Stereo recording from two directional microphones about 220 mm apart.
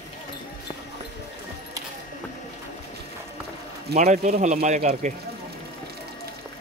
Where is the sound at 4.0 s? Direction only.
30° right (ahead or behind).